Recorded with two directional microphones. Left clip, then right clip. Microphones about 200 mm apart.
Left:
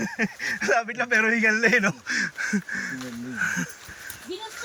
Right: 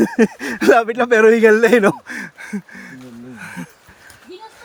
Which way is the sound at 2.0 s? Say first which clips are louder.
Left 4 dB; 20° right (ahead or behind).